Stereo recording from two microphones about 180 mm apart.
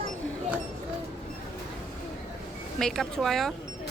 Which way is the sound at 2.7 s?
Centre (ahead or behind).